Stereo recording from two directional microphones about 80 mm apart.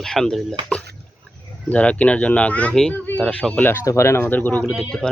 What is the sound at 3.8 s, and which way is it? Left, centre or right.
Speech, left.